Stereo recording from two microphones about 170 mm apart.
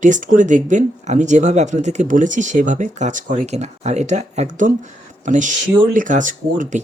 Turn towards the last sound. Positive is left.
turn(degrees=-50)  # may be behind; listen again after turning